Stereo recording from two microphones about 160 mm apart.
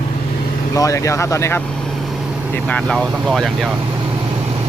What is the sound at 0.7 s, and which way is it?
Speech, 20° left (ahead or behind).